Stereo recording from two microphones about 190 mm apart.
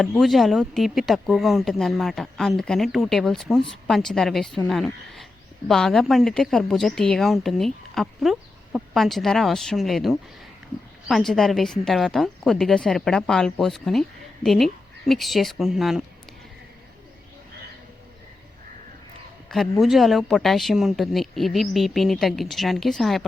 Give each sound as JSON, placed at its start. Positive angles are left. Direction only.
{"t": 0.0, "sound": "speech", "side_deg": 0}
{"t": 19.8, "sound": "speech", "side_deg": 0}